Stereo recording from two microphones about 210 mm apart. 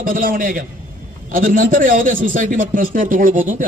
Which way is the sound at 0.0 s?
40° right (ahead or behind).